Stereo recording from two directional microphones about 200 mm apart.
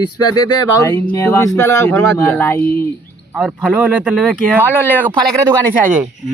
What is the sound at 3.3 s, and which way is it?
Speech, centre (ahead or behind).